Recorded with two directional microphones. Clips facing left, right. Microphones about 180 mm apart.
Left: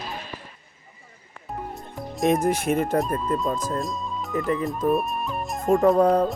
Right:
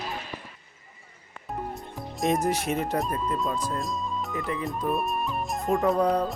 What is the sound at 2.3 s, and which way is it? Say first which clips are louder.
Speech: left 4 dB; 55° left (ahead or behind).